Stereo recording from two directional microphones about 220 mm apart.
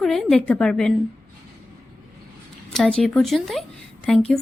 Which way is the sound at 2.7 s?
5° left (ahead or behind).